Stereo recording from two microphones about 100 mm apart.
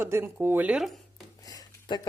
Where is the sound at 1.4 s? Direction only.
40° left (ahead or behind).